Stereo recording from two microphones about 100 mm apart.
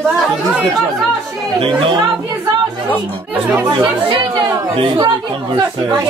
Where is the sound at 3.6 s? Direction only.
55° right (ahead or behind).